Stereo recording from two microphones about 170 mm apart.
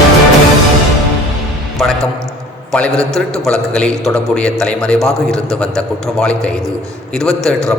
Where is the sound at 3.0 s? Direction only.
5° left (ahead or behind).